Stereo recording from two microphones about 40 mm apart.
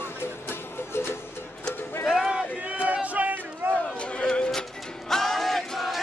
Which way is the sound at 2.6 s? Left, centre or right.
Right.